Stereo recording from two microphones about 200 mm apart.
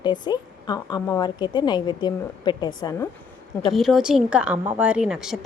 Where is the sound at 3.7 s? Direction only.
Centre (ahead or behind).